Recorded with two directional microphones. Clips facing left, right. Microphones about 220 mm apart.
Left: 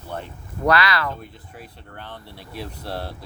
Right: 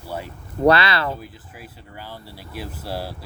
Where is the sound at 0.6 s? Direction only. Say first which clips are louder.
Right 3 dB; 30° right (ahead or behind).